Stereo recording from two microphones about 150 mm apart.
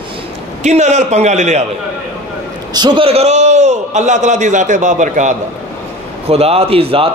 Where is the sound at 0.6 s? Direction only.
50° right (ahead or behind).